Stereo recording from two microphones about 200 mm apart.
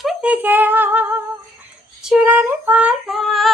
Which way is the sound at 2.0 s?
5° right (ahead or behind).